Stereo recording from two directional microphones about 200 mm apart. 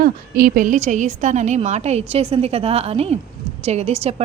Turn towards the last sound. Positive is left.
turn(degrees=-30)  # may be behind; listen again after turning